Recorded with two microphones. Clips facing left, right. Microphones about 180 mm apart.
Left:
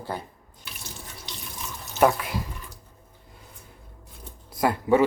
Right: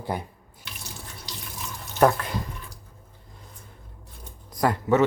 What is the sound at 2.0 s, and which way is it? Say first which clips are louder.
Speech: even; 10° left (ahead or behind).